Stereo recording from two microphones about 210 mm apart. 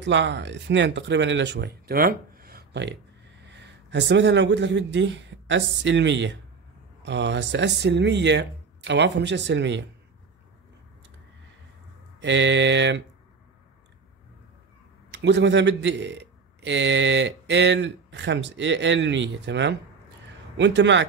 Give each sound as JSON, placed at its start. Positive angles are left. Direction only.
{"t": 0.0, "sound": "speech", "side_deg": -60}
{"t": 12.2, "sound": "speech", "side_deg": -60}
{"t": 15.0, "sound": "speech", "side_deg": -55}